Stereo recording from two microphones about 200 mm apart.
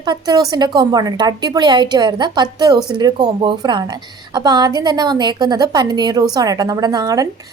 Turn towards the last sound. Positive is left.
turn(degrees=-20)  # may be behind; listen again after turning